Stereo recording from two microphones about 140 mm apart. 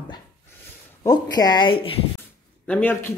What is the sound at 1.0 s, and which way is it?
Speech, 25° left (ahead or behind).